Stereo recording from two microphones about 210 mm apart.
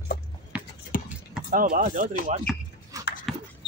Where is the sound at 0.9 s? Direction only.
40° left (ahead or behind).